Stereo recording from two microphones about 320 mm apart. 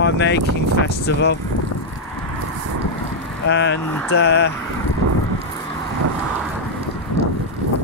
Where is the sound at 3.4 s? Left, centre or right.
Left.